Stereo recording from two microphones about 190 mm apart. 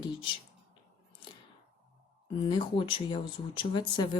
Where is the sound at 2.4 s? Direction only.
25° left (ahead or behind).